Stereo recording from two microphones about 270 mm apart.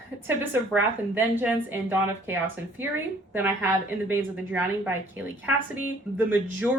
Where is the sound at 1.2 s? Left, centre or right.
Centre.